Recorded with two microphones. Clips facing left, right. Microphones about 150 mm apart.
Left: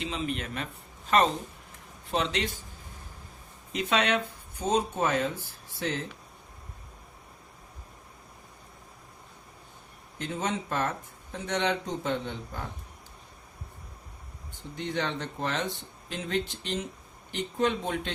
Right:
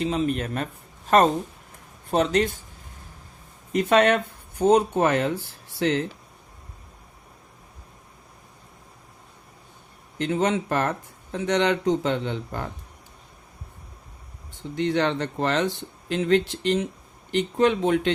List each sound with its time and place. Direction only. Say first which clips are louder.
0.0 s speech: right 8 dB; 45° right (ahead or behind)
2.0 s speech: right 8 dB; 45° right (ahead or behind)
3.7 s speech: right 8 dB; 50° right (ahead or behind); by 6.0 s 75° right (ahead or behind)
10.2 s speech: right 9 dB; 85° right
14.8 s speech: right 9 dB; 75° right (ahead or behind)